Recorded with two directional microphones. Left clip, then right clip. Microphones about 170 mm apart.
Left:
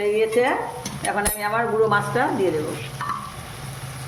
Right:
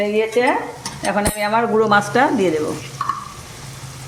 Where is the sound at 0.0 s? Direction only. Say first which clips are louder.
Right 3 dB; 55° right (ahead or behind).